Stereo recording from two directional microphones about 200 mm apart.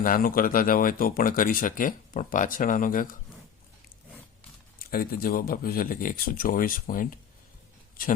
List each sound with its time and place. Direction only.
0.0 s speech: 45° left (ahead or behind)
4.9 s speech: 50° left (ahead or behind)